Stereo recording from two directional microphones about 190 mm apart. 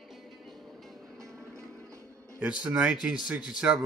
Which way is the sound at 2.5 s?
5° right (ahead or behind).